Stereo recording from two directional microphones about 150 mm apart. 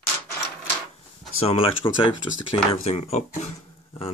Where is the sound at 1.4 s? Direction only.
40° left (ahead or behind).